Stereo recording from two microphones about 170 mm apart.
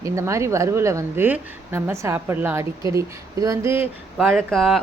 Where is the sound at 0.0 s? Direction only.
15° right (ahead or behind).